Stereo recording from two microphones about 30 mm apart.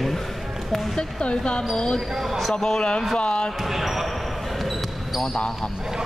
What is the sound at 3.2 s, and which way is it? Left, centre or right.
Speech, left.